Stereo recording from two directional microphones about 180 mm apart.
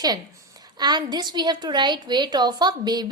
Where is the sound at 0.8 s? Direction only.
25° right (ahead or behind).